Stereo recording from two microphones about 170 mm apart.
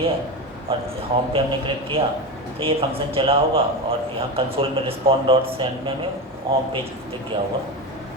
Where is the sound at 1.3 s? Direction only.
30° right (ahead or behind).